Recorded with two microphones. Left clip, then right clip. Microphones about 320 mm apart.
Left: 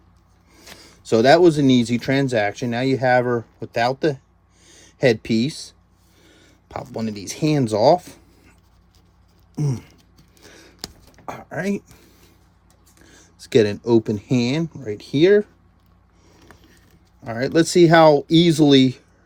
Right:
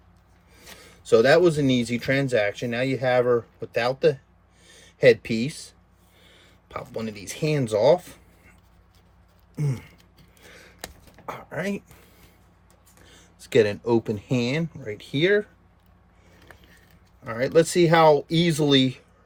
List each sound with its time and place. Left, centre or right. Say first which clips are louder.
0.8 s speech: even; centre
6.7 s speech: left 4 dB; centre
9.6 s speech: left 5 dB; centre
10.3 s a sound: left 2 dB; centre
13.4 s speech: left 3 dB; centre
17.2 s speech: left 1 dB; centre